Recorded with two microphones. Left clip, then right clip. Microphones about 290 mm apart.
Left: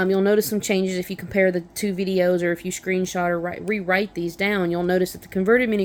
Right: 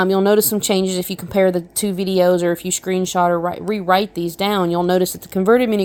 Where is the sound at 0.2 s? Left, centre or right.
Centre.